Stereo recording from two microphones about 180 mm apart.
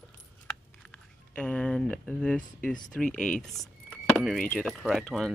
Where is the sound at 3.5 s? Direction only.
Centre (ahead or behind).